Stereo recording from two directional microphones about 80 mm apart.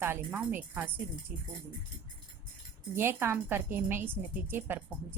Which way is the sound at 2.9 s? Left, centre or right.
Right.